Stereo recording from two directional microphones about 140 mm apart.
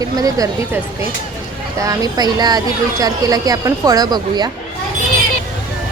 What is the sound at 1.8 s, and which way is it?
Speech, 25° right (ahead or behind).